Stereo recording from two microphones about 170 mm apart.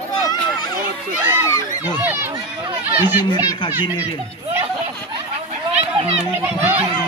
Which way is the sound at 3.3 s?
25° left (ahead or behind).